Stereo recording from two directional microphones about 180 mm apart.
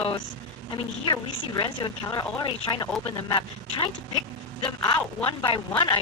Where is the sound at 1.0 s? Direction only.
25° left (ahead or behind).